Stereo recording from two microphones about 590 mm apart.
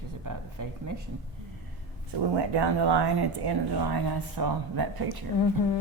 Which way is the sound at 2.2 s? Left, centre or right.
Right.